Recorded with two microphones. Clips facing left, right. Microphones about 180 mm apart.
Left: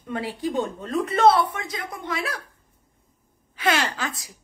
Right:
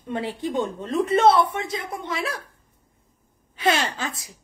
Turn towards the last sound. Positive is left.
turn(degrees=-25)  # may be behind; listen again after turning